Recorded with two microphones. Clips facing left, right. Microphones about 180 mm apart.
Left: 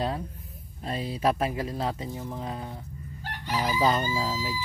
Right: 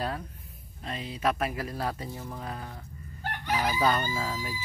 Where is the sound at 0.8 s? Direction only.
35° left (ahead or behind); by 2.8 s 20° left (ahead or behind).